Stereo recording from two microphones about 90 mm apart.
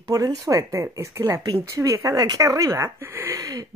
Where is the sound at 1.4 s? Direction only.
45° right (ahead or behind).